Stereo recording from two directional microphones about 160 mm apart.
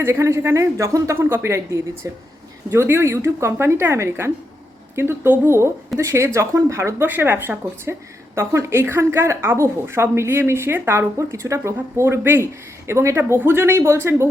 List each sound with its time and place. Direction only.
0.0 s a woman's voice: 15° right (ahead or behind)